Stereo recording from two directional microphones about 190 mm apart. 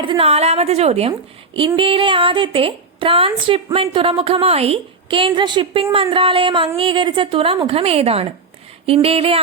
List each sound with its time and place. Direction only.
0.0 s a woman's voice: 30° right (ahead or behind)